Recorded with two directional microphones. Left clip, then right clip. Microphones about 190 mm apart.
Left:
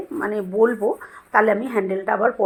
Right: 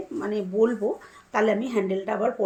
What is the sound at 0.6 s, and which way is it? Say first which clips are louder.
Speech: left 5 dB; 20° left (ahead or behind).